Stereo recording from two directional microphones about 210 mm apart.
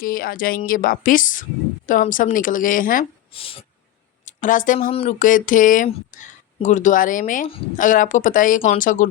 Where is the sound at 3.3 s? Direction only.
25° left (ahead or behind).